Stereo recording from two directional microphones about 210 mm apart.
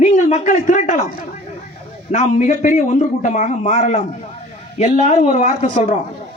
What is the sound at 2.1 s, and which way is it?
A man's voice, 35° left (ahead or behind).